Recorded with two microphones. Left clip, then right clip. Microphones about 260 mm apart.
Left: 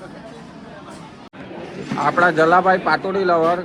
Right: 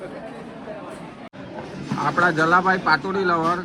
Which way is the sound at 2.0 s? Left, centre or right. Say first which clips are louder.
Left 4 dB; left.